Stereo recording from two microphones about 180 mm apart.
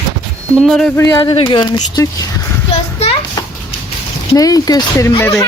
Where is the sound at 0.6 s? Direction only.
Centre (ahead or behind).